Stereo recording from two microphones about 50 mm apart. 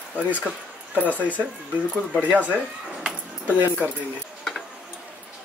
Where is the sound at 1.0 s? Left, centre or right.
Left.